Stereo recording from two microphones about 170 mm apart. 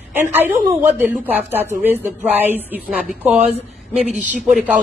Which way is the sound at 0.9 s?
10° right (ahead or behind).